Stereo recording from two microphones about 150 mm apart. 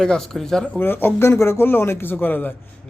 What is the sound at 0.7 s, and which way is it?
A man's voice, 15° left (ahead or behind).